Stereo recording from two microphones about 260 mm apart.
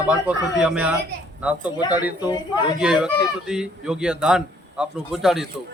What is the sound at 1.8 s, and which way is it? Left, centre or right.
Speech, centre.